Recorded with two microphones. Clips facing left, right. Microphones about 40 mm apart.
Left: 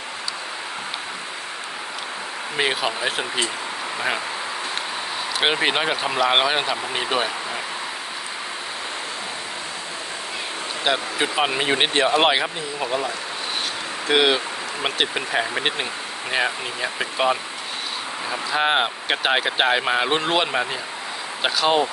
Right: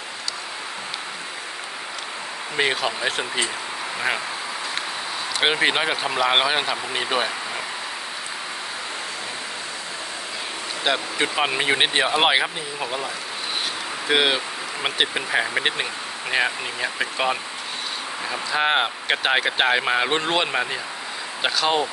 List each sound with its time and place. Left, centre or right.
2.6 s speech: centre
5.4 s speech: centre
10.8 s speech: centre
14.1 s speech: centre